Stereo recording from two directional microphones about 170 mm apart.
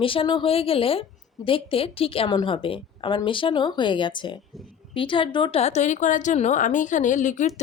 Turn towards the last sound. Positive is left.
turn(degrees=45)  # may be behind; listen again after turning